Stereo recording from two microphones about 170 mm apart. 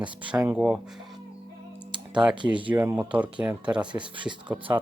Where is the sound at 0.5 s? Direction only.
10° right (ahead or behind).